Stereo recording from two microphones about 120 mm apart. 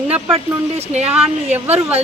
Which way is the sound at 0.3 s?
60° right (ahead or behind).